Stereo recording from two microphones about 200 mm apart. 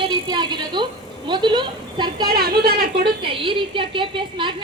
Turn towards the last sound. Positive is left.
turn(degrees=-25)  # may be behind; listen again after turning